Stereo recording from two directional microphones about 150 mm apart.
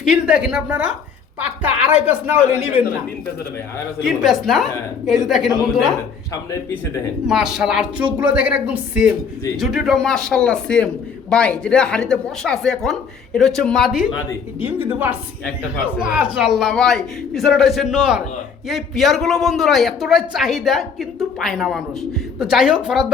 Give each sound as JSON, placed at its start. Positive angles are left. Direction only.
{"t": 0.0, "sound": "speech", "side_deg": -5}
{"t": 2.5, "sound": "speech", "side_deg": -15}
{"t": 4.0, "sound": "a man's voice", "side_deg": 0}
{"t": 6.3, "sound": "speech", "side_deg": 20}
{"t": 7.3, "sound": "a man's voice", "side_deg": -5}
{"t": 14.1, "sound": "speech", "side_deg": 30}
{"t": 14.6, "sound": "a man's voice", "side_deg": -15}